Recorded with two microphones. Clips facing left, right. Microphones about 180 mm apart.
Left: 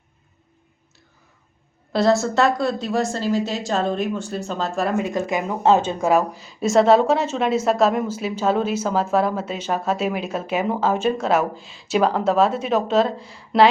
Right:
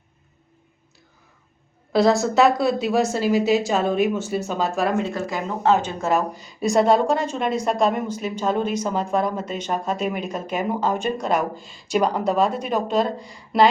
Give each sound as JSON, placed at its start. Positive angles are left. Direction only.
{"t": 1.9, "sound": "a woman's voice", "side_deg": 0}
{"t": 5.0, "sound": "speech", "side_deg": 15}
{"t": 6.0, "sound": "a woman's voice", "side_deg": 10}